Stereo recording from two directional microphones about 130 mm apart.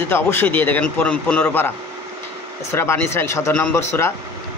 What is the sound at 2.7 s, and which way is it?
Speech, 20° left (ahead or behind).